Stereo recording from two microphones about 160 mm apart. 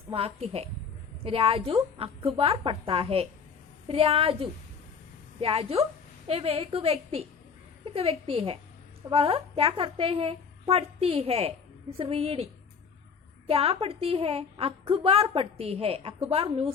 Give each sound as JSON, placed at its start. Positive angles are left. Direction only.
{"t": 0.1, "sound": "a woman's voice", "side_deg": -40}
{"t": 13.5, "sound": "a woman's voice", "side_deg": -35}